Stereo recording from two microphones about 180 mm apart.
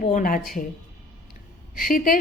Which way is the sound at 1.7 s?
50° left (ahead or behind).